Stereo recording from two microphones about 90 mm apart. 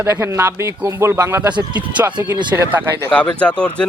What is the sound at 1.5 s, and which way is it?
Speech, 60° right (ahead or behind).